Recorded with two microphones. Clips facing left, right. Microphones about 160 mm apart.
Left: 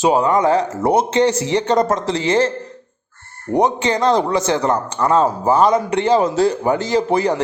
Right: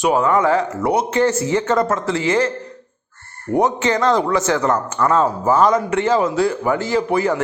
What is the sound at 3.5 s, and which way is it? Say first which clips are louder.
Speech: left 1 dB; 15° left (ahead or behind).